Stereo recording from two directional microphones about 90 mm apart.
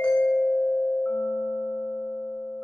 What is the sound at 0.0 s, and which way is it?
Music, 10° left (ahead or behind).